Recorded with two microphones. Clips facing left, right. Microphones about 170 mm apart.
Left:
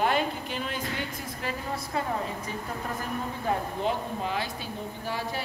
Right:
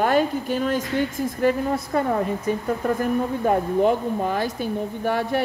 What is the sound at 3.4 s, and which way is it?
Speech, 50° right (ahead or behind).